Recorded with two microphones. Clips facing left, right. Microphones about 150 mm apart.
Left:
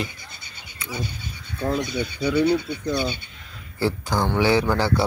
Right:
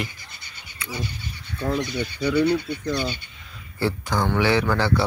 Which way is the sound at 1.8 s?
15° left (ahead or behind).